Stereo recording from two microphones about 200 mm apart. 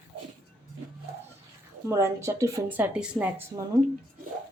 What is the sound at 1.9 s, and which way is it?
Speech, 15° right (ahead or behind).